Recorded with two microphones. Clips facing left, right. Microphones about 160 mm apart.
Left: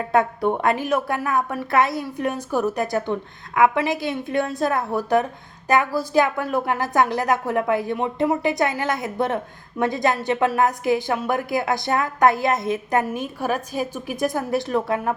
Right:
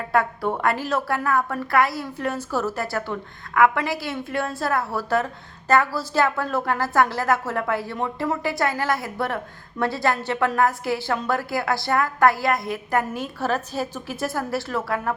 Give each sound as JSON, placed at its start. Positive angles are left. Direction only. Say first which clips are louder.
{"t": 0.1, "sound": "a woman's voice", "louder": "left 2 dB", "side_deg": 20}